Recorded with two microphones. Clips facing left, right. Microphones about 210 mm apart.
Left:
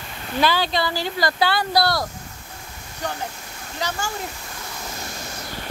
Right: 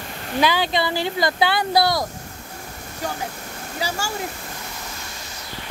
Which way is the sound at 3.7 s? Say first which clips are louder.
Right 1 dB; 10° right (ahead or behind).